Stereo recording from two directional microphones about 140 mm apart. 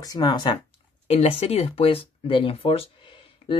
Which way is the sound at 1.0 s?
50° left (ahead or behind).